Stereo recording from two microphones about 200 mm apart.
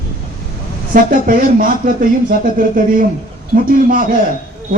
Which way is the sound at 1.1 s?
45° right (ahead or behind).